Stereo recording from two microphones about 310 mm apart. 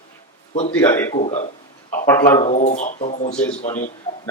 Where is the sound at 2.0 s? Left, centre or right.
Centre.